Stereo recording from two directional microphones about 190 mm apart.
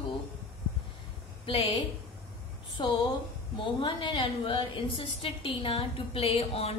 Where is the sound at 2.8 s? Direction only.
25° left (ahead or behind).